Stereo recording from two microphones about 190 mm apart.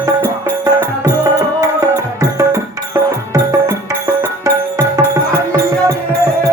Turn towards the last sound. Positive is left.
turn(degrees=-15)  # may be behind; listen again after turning